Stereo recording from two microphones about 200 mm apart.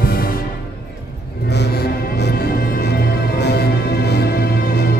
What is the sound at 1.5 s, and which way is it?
Music, 55° left (ahead or behind).